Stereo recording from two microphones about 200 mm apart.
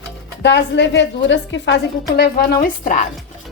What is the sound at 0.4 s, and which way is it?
A woman's voice, 60° left (ahead or behind).